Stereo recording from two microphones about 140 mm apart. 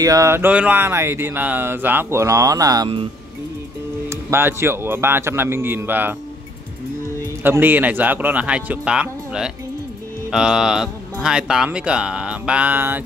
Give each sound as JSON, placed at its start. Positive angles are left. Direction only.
{"t": 0.0, "sound": "speech", "side_deg": -20}
{"t": 4.1, "sound": "speech", "side_deg": -15}
{"t": 7.4, "sound": "speech", "side_deg": -15}
{"t": 10.3, "sound": "music", "side_deg": -5}
{"t": 11.2, "sound": "speech", "side_deg": -5}